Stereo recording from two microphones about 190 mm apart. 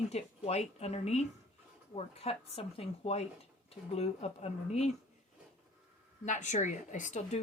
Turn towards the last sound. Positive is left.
turn(degrees=40)  # may be behind; listen again after turning